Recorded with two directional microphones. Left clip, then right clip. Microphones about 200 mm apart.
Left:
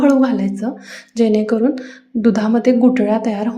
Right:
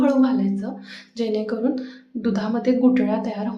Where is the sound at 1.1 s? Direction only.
30° left (ahead or behind).